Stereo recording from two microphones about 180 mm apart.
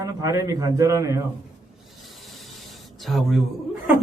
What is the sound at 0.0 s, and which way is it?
A man's voice, 20° right (ahead or behind).